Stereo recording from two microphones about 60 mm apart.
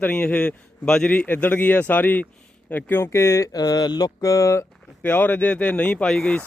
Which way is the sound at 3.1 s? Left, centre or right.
Left.